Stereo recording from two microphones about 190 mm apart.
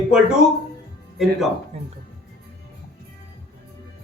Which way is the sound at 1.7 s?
30° right (ahead or behind).